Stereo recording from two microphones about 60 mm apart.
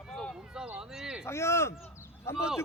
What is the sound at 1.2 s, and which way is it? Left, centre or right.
Speech, left.